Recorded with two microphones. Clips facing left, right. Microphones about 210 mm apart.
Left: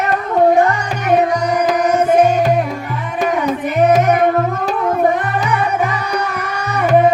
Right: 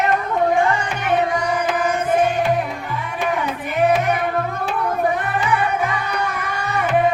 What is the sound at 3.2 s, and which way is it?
Child singing, 40° left (ahead or behind).